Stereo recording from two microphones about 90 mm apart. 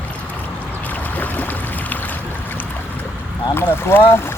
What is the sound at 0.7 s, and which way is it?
Boat, 20° left (ahead or behind).